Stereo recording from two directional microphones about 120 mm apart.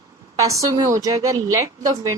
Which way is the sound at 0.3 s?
25° right (ahead or behind).